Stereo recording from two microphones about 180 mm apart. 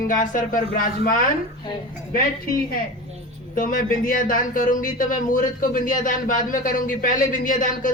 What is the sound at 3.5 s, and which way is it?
Speech, 50° left (ahead or behind).